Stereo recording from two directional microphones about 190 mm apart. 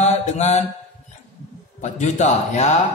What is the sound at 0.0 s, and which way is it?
Mantra, 35° left (ahead or behind).